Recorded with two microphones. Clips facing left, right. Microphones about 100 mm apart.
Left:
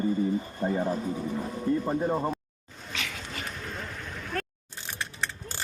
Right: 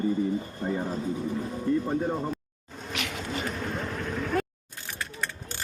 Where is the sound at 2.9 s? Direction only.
20° right (ahead or behind).